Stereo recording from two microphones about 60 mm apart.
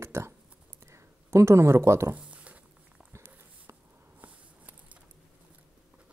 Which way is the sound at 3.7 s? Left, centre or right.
Right.